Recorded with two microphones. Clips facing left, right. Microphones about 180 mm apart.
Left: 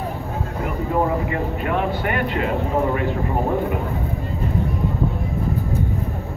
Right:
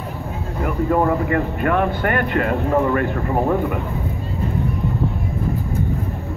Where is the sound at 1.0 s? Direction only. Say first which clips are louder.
Right 3 dB; 55° right (ahead or behind).